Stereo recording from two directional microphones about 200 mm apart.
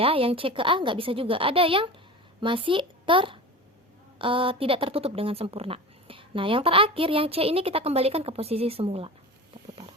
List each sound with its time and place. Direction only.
0.0 s speech: 30° right (ahead or behind)